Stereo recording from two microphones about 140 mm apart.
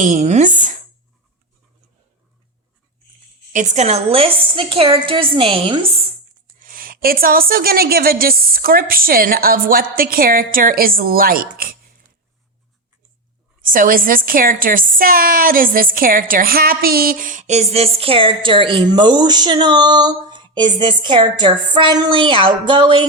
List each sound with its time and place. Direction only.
0.0 s speech: 60° right (ahead or behind)
3.5 s a woman's voice: 60° right (ahead or behind); by 6.0 s 40° right (ahead or behind)
6.6 s a woman's voice: 85° right
13.7 s a woman's voice: 80° right; by 23.0 s 35° right (ahead or behind)